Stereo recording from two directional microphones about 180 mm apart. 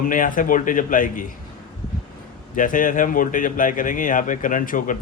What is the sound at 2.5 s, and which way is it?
A man's voice, 45° left (ahead or behind).